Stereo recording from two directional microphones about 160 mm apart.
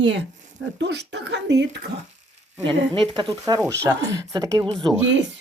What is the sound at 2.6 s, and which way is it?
Speech, 30° right (ahead or behind).